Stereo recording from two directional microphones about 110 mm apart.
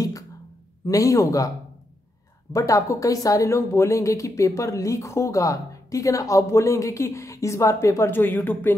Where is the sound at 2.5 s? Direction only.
30° left (ahead or behind).